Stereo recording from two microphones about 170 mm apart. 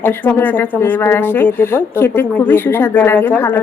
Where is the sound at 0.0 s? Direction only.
10° left (ahead or behind).